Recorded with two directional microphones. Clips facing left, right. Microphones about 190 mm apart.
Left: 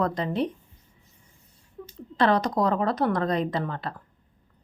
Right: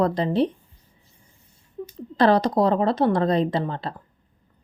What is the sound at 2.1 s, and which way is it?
Speech, 35° right (ahead or behind).